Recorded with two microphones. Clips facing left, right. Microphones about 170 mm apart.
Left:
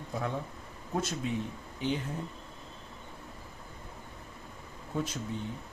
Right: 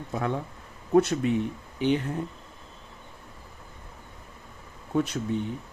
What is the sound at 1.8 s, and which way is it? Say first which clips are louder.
Cough: right 8 dB; 65° right (ahead or behind).